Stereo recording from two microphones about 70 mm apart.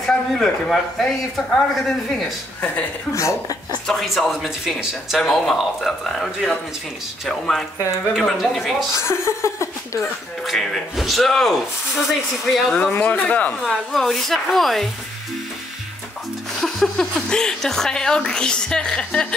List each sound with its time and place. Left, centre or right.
0.0 s a man's voice: centre
3.1 s speech: left
3.8 s speech: centre
8.9 s speech: left
10.4 s speech: centre
12.9 s a man's voice: left
13.7 s speech: centre
16.6 s speech: centre